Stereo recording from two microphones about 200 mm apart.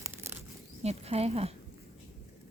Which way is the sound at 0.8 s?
30° right (ahead or behind).